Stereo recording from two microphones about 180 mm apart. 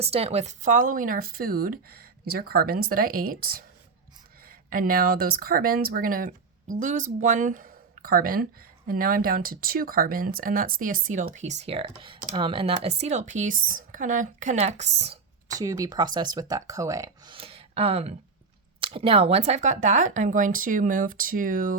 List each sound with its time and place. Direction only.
0.0 s speech: 35° right (ahead or behind)
15.4 s speech: 20° right (ahead or behind)
17.3 s speech: 30° right (ahead or behind); by 21.8 s 50° right (ahead or behind)